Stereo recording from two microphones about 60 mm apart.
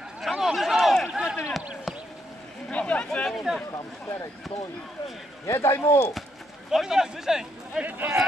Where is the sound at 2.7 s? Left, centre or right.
Left.